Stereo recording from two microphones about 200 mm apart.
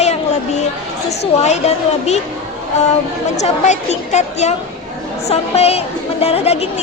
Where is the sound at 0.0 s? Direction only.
35° left (ahead or behind).